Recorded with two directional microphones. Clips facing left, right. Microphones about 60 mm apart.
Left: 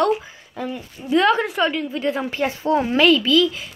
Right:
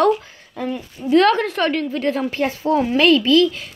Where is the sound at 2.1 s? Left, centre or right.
Left.